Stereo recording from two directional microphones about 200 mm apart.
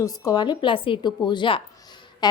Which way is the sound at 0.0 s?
15° left (ahead or behind).